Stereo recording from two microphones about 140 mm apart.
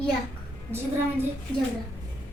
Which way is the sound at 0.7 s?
15° right (ahead or behind).